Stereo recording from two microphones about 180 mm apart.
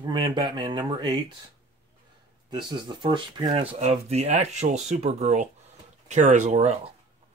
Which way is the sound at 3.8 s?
35° right (ahead or behind).